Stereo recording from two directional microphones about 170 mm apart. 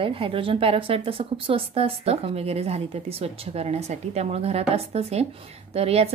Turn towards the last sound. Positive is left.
turn(degrees=-35)  # may be behind; listen again after turning